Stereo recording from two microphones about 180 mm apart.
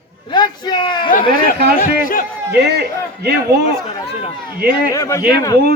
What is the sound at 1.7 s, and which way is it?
Speech, 50° left (ahead or behind).